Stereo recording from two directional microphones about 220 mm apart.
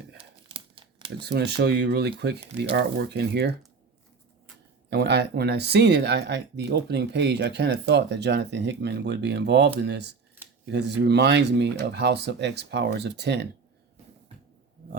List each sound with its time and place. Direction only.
0.2 s crumpling: 25° right (ahead or behind)
1.2 s speech: 50° right (ahead or behind)
4.9 s speech: 50° right (ahead or behind)